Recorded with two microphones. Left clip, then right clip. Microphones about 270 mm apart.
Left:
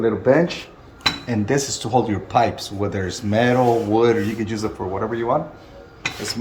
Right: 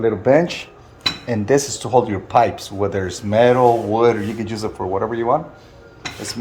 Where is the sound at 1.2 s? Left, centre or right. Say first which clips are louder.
Right 4 dB; right.